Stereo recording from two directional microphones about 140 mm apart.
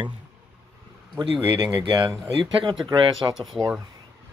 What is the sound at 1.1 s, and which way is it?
Speech, 35° right (ahead or behind).